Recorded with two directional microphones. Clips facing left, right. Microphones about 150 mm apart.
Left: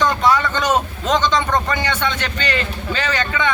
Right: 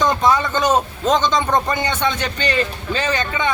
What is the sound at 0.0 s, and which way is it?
A man's voice, 20° right (ahead or behind).